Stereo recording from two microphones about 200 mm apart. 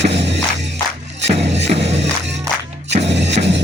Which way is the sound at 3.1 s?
60° right (ahead or behind).